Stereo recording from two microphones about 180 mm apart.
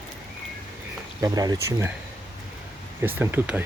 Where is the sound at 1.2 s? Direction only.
20° right (ahead or behind).